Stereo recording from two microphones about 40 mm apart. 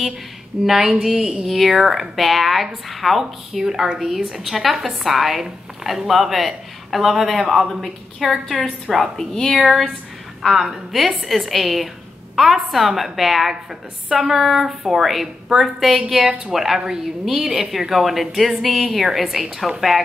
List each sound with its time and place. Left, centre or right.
0.7 s a woman's voice: centre
1.1 s a woman's voice: right
1.4 s speech: centre
9.1 s speech: centre
9.6 s a woman's voice: centre
19.7 s a woman's voice: centre